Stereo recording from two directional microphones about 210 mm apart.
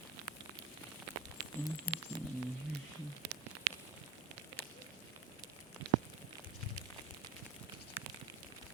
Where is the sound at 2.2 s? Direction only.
25° right (ahead or behind).